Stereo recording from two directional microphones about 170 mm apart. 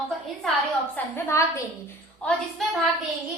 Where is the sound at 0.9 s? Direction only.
15° left (ahead or behind).